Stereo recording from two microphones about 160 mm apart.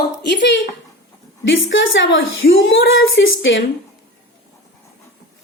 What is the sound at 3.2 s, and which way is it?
Speech, 90° left.